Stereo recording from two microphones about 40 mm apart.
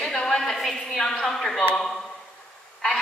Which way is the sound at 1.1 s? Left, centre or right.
Centre.